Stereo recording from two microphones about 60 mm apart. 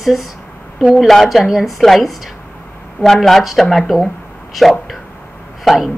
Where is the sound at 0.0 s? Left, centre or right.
Centre.